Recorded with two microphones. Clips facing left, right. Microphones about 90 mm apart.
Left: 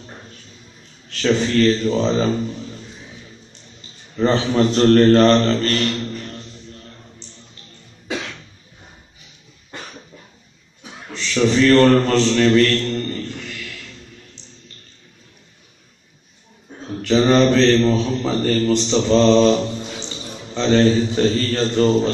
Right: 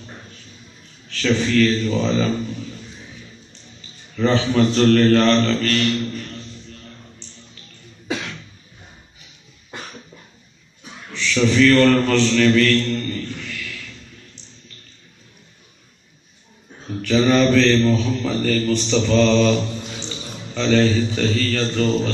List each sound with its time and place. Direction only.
1.0 s a man's voice: 35° left (ahead or behind)
4.2 s a man's voice: 35° left (ahead or behind)
11.1 s mantra: 30° left (ahead or behind)
17.1 s a man's voice: 30° left (ahead or behind)